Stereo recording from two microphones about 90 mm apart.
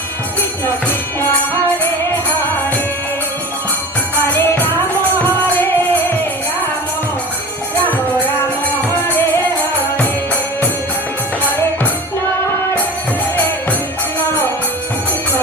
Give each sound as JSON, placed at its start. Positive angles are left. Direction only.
{"t": 0.6, "sound": "music", "side_deg": 25}
{"t": 4.3, "sound": "music", "side_deg": 20}